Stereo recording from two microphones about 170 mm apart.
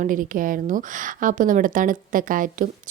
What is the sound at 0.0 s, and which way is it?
Speech, 50° right (ahead or behind).